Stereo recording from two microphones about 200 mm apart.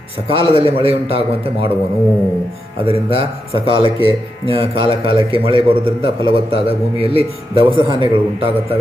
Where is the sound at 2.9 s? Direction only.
30° right (ahead or behind).